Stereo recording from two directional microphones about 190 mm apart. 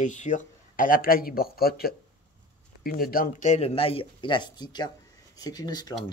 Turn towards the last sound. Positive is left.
turn(degrees=20)  # may be behind; listen again after turning